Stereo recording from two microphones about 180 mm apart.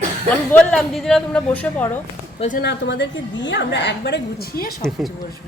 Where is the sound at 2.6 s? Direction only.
75° left (ahead or behind).